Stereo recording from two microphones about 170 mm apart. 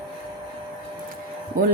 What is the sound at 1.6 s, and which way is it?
Speech, 55° right (ahead or behind).